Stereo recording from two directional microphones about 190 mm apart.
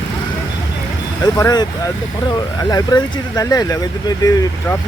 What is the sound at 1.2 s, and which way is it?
Speech, 20° left (ahead or behind).